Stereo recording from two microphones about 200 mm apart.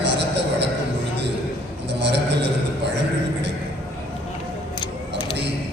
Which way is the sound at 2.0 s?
60° right (ahead or behind).